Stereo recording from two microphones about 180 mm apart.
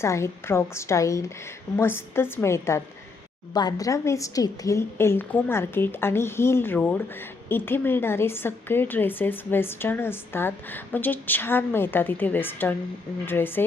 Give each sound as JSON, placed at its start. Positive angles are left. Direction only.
{"t": 0.0, "sound": "a woman's voice", "side_deg": 15}